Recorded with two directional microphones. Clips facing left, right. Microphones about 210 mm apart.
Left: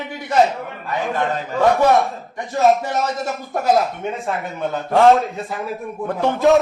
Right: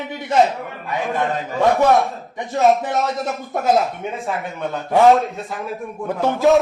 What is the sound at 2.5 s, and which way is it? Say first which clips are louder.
Speech: even; centre (ahead or behind).